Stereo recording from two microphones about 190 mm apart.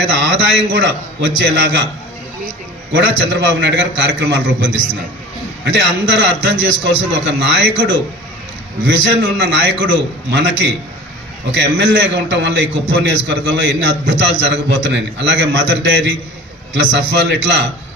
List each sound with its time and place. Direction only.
0.0 s a man's voice: 70° right (ahead or behind)
2.9 s a man's voice: 70° right (ahead or behind)
9.2 s a man's voice: 70° right (ahead or behind)
11.6 s a man's voice: 70° right (ahead or behind)